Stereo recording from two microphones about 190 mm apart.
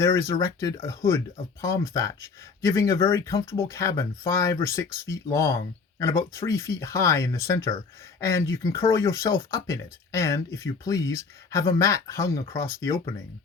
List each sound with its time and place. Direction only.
0.0 s speech: 15° left (ahead or behind)